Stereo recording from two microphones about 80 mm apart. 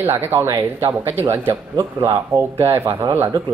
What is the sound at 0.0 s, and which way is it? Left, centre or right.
A man's voice, right.